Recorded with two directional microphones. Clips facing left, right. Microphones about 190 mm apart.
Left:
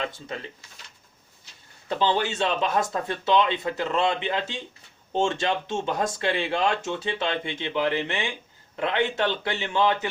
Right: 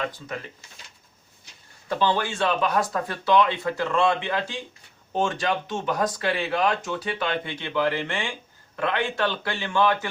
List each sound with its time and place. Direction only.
1.9 s speech: 20° left (ahead or behind)